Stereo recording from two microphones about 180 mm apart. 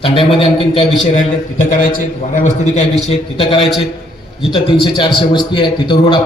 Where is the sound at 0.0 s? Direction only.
30° left (ahead or behind).